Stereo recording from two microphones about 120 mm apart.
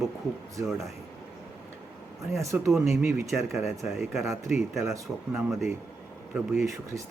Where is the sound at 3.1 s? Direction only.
25° right (ahead or behind).